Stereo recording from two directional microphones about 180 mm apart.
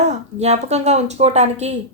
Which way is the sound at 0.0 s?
40° right (ahead or behind).